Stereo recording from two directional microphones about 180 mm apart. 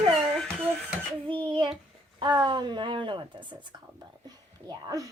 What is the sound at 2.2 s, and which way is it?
Whispering, 25° right (ahead or behind).